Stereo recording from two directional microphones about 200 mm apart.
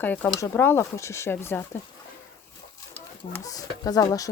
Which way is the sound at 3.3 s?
15° left (ahead or behind).